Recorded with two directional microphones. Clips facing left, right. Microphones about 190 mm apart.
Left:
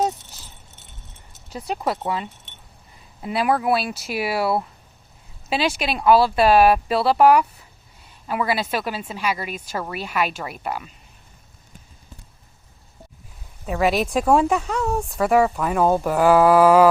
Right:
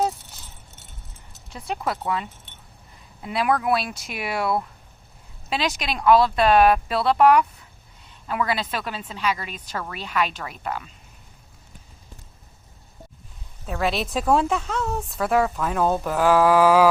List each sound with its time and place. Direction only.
1.5 s speech: 35° left (ahead or behind)
3.2 s speech: centre (ahead or behind)
5.7 s a woman's voice: 5° left (ahead or behind)
13.7 s speech: 5° left (ahead or behind)
14.8 s a woman's voice: 10° left (ahead or behind)
16.6 s a sound: 5° right (ahead or behind)